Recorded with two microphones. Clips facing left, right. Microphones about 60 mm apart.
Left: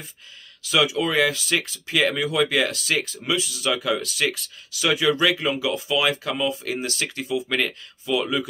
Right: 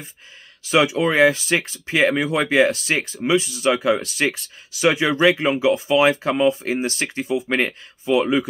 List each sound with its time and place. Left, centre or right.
0.7 s speech: right